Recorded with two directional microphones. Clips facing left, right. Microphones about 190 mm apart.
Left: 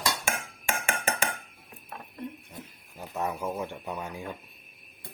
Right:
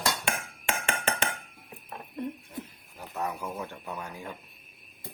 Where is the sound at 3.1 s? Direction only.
20° left (ahead or behind).